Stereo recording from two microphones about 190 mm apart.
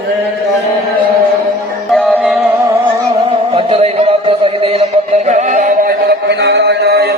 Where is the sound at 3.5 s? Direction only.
30° right (ahead or behind).